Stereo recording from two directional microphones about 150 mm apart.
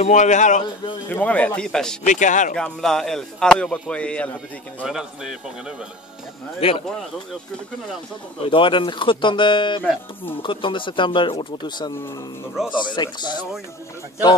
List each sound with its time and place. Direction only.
0.0 s a man's voice: 50° left (ahead or behind)
1.0 s speech: 10° left (ahead or behind)
2.0 s speech: 55° left (ahead or behind)
2.5 s speech: 5° left (ahead or behind)
4.8 s speech: 5° right (ahead or behind)
6.6 s speech: 40° left (ahead or behind)
8.5 s speech: 35° left (ahead or behind)